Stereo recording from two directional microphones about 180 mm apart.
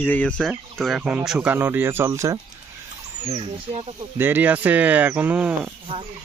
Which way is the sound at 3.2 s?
35° right (ahead or behind).